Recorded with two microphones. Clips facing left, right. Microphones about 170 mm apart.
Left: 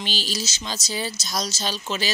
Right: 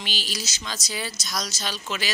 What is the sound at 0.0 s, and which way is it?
Speech, 30° left (ahead or behind).